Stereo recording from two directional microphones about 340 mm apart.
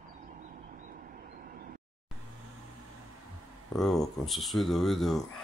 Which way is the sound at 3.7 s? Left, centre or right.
Centre.